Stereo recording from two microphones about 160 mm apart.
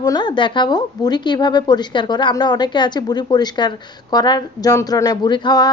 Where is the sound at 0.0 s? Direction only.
25° left (ahead or behind).